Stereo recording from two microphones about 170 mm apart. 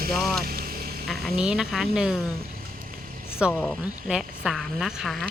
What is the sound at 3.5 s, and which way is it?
Speech, 10° left (ahead or behind).